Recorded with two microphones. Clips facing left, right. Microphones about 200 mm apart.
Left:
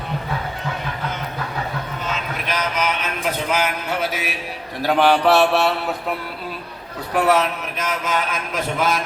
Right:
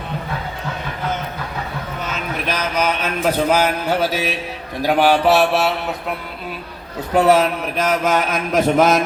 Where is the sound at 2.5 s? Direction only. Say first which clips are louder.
Right 2 dB; 40° right (ahead or behind).